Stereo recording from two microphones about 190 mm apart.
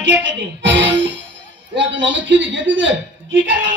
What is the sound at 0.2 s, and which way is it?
Speech, 75° right (ahead or behind).